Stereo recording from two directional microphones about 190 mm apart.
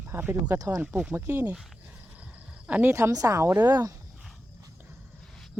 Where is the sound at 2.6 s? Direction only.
10° right (ahead or behind).